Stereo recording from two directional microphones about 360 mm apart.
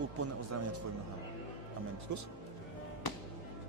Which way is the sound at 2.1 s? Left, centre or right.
Right.